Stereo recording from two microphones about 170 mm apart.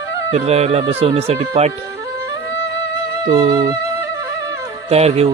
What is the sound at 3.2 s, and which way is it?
Music, 30° right (ahead or behind).